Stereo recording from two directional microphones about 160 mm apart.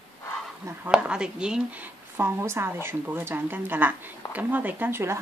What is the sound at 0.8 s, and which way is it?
A woman's voice, 5° right (ahead or behind).